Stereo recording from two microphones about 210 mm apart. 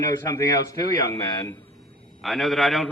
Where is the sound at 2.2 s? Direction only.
Centre (ahead or behind).